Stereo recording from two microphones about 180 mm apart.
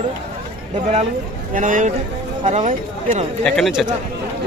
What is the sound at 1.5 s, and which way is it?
A man's voice, 45° right (ahead or behind).